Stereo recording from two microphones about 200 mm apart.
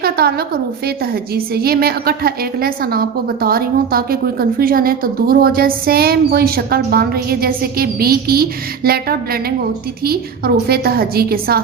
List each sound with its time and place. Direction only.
0.0 s a woman's voice: 50° right (ahead or behind)